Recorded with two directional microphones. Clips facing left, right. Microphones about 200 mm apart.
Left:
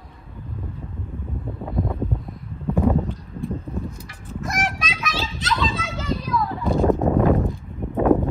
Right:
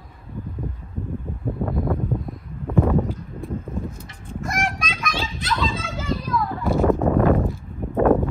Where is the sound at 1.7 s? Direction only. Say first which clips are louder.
Even; centre (ahead or behind).